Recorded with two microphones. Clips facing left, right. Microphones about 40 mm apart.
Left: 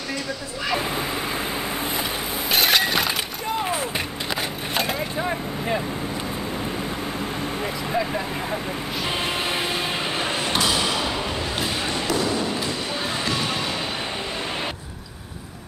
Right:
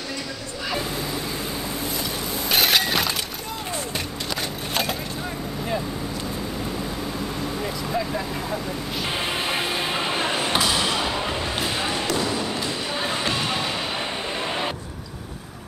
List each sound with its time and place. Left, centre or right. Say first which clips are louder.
0.7 s bow-wow: left 1 dB; left
2.5 s breaking: left 1 dB; centre
7.6 s vehicle: left 2 dB; centre
9.0 s music: left 1 dB; centre
10.6 s a sound: even; centre
12.9 s music: right 2 dB; centre